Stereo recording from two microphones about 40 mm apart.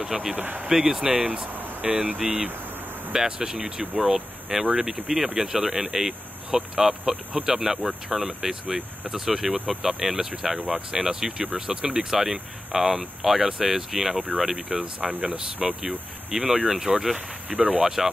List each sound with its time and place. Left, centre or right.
0.0 s speech: centre
1.1 s speech: right
1.9 s speech: right
3.1 s speech: centre
10.7 s speech: centre
14.7 s speech: right
17.5 s speech: right
17.7 s speech: centre